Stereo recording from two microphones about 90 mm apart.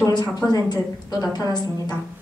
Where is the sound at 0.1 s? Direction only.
50° left (ahead or behind).